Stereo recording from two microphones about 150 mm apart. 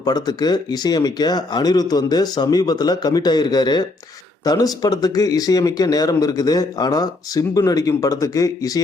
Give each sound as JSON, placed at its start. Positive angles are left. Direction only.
{"t": 0.0, "sound": "speech", "side_deg": 25}